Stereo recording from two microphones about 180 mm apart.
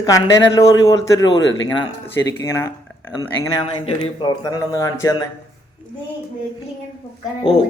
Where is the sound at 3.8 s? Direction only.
25° left (ahead or behind).